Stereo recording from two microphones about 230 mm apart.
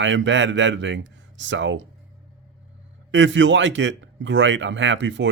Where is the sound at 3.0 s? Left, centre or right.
Right.